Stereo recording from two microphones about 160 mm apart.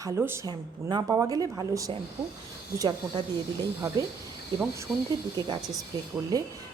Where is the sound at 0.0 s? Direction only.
15° right (ahead or behind).